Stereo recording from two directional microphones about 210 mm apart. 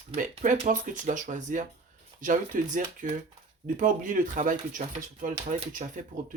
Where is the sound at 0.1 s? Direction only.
40° right (ahead or behind).